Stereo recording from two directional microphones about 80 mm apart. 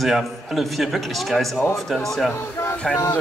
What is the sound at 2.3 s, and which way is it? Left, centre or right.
Speech, left.